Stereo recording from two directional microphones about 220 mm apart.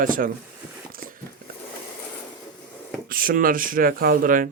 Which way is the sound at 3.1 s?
40° right (ahead or behind).